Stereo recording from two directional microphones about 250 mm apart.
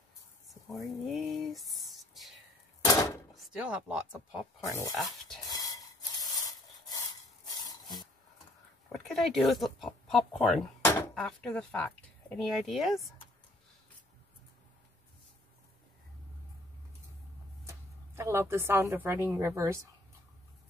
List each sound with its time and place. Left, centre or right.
0.5 s a sound: centre
2.8 s a sound: centre
3.3 s speech: centre
4.7 s speech: centre
5.5 s rub: centre
8.9 s speech: centre
17.6 s speech: centre